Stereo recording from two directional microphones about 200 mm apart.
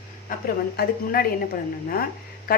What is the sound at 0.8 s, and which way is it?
Speech, 50° left (ahead or behind).